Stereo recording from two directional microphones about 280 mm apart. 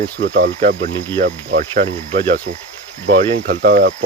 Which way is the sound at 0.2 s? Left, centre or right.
Right.